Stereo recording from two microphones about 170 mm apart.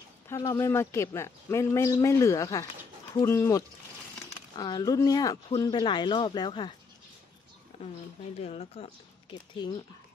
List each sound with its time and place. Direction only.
0.3 s a man's voice: 15° left (ahead or behind)
7.7 s a sound: 35° left (ahead or behind)
8.4 s speech: 35° left (ahead or behind)